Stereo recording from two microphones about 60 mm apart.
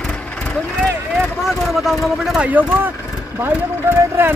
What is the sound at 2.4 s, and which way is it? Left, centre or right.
Speech, right.